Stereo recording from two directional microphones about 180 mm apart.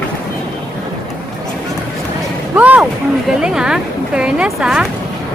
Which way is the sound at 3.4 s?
5° right (ahead or behind).